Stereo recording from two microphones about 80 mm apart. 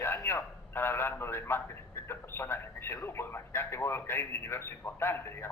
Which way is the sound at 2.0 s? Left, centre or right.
Left.